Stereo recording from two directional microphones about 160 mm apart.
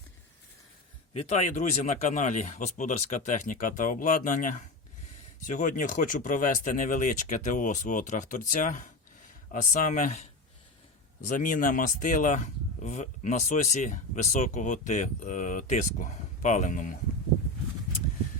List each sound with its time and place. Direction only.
1.1 s speech: 40° left (ahead or behind)